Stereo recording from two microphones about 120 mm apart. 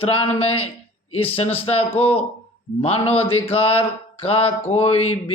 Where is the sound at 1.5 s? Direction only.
55° left (ahead or behind).